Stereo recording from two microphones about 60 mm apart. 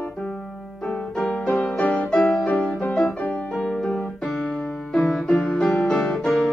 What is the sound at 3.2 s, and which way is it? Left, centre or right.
Music, left.